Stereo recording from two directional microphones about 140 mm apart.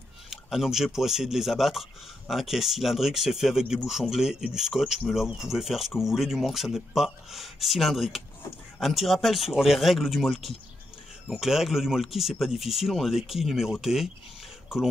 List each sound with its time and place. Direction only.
0.3 s speech: centre (ahead or behind)